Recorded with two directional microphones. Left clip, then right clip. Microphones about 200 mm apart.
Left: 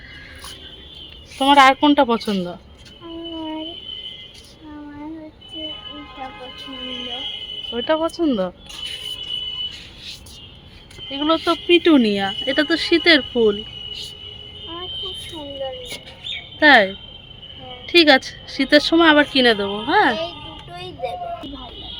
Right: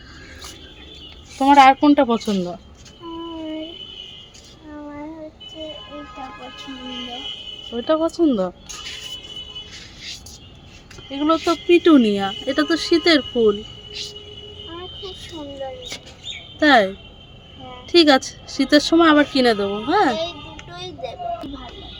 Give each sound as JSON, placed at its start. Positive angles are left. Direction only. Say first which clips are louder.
{"t": 1.4, "sound": "speech", "louder": "right 1 dB", "side_deg": -5}
{"t": 7.7, "sound": "speech", "louder": "even", "side_deg": -5}
{"t": 11.1, "sound": "speech", "louder": "even", "side_deg": -5}
{"t": 16.6, "sound": "speech", "louder": "left 2 dB", "side_deg": -10}
{"t": 20.7, "sound": "child singing", "louder": "left 3 dB", "side_deg": 20}